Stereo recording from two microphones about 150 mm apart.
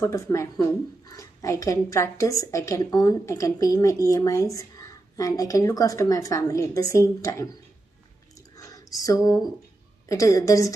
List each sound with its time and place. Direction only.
0.0 s a woman's voice: 20° left (ahead or behind)
8.5 s a sound: 20° left (ahead or behind)
10.0 s a woman's voice: 20° left (ahead or behind)